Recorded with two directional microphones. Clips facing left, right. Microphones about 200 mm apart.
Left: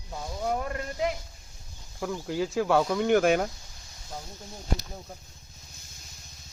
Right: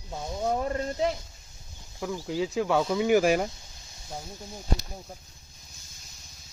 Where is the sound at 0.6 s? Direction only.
30° right (ahead or behind).